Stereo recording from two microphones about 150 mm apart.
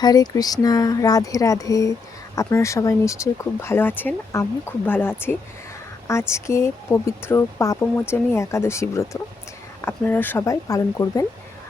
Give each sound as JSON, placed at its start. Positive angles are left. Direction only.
{"t": 0.0, "sound": "speech", "side_deg": 25}